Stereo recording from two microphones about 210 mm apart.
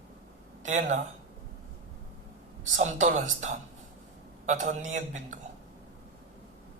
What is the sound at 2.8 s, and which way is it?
A man's voice, 35° right (ahead or behind).